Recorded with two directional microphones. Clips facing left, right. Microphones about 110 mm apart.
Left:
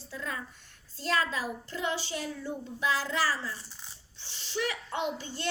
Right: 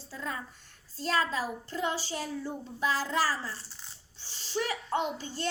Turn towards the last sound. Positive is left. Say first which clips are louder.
# even
turn(degrees=-35)  # may be behind; listen again after turning